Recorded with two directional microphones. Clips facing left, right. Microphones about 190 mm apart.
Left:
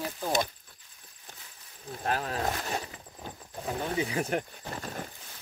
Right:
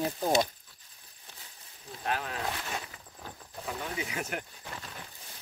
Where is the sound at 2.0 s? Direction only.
40° left (ahead or behind).